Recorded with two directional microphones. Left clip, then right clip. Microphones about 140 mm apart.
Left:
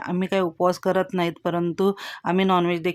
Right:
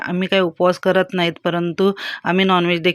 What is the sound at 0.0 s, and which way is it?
Speech, 10° right (ahead or behind).